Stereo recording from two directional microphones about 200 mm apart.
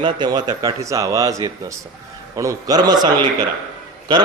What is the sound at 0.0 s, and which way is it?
A man's voice, 20° right (ahead or behind).